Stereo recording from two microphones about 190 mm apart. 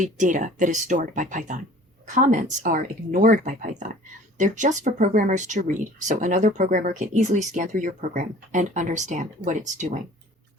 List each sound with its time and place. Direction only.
0.0 s speech: 40° right (ahead or behind)